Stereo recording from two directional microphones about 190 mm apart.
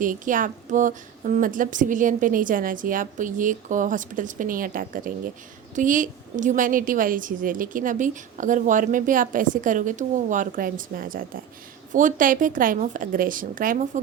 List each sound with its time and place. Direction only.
0.0 s a woman's voice: 45° right (ahead or behind)